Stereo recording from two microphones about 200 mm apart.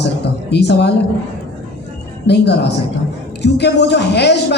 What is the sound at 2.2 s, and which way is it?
A woman's voice, 60° left (ahead or behind).